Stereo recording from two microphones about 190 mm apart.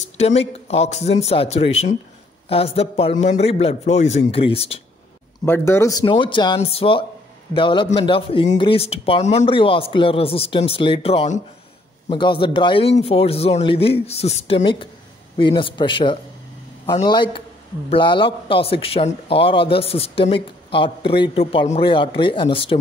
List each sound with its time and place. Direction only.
0.0 s a man's voice: 35° left (ahead or behind)
5.4 s a man's voice: 15° left (ahead or behind)